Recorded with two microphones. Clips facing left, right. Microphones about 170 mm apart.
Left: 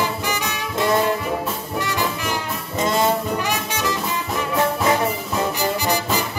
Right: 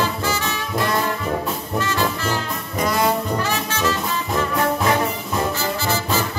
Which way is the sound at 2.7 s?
25° left (ahead or behind).